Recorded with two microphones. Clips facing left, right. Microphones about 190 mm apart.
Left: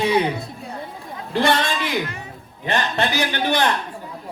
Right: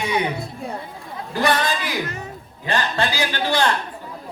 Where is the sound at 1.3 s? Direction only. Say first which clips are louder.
Left 1 dB; 25° left (ahead or behind).